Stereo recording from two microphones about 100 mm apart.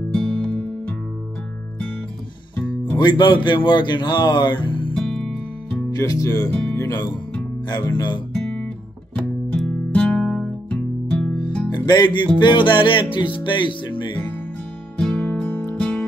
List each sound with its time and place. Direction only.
0.1 s music: 10° left (ahead or behind)
2.5 s music: 15° left (ahead or behind)
3.0 s speech: 45° left (ahead or behind)
4.9 s music: 5° left (ahead or behind)
5.9 s speech: 35° left (ahead or behind)
9.7 s music: 10° left (ahead or behind)
11.7 s music: 50° left (ahead or behind)
12.4 s speech: 50° left (ahead or behind)
15.0 s music: 10° left (ahead or behind)